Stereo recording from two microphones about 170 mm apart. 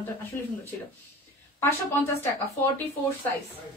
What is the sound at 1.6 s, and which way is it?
A woman's voice, 10° left (ahead or behind).